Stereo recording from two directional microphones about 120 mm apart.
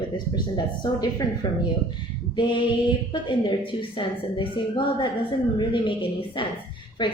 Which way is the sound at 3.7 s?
45° left (ahead or behind).